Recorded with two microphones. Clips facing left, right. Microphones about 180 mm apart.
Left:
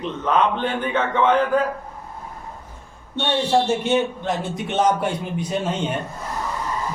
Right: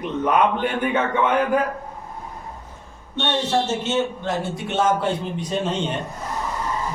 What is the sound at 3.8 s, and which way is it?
A man's voice, 15° left (ahead or behind).